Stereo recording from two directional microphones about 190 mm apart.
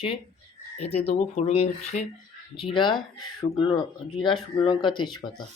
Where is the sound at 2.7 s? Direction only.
25° left (ahead or behind).